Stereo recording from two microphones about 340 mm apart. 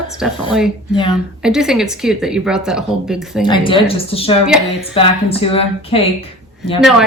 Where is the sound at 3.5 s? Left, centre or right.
Centre.